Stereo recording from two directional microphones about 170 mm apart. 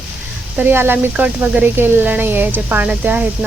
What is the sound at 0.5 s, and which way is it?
Speech, 10° right (ahead or behind).